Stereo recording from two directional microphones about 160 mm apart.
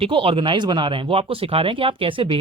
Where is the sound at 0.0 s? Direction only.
35° right (ahead or behind).